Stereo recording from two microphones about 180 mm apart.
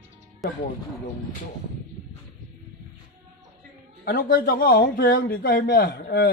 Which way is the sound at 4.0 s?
55° left (ahead or behind).